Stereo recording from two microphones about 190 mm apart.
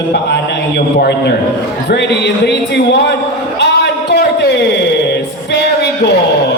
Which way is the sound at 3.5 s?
65° left (ahead or behind).